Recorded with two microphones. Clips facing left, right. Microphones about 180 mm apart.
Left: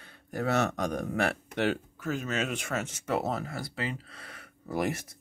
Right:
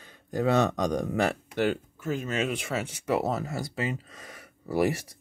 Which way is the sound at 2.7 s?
10° right (ahead or behind).